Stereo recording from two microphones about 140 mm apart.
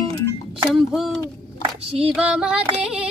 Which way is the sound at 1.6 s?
45° right (ahead or behind).